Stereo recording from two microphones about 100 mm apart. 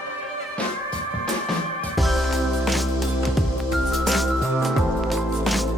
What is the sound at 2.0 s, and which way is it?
Music, centre (ahead or behind).